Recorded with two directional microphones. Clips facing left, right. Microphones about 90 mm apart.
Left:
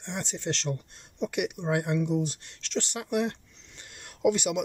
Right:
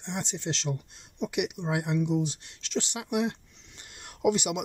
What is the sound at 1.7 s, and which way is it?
Speech, 10° right (ahead or behind).